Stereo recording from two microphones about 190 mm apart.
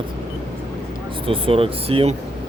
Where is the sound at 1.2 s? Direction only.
30° right (ahead or behind).